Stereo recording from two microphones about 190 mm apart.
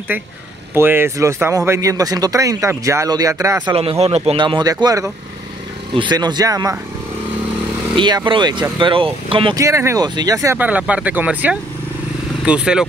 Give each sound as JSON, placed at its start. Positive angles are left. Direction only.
{"t": 0.1, "sound": "speech", "side_deg": -10}
{"t": 4.0, "sound": "speech", "side_deg": -35}
{"t": 7.9, "sound": "speech", "side_deg": -25}
{"t": 9.6, "sound": "speech", "side_deg": -15}